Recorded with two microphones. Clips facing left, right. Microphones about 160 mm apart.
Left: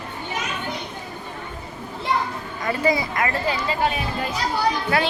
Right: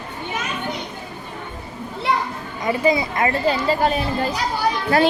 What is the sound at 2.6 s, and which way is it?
Speech, 20° right (ahead or behind).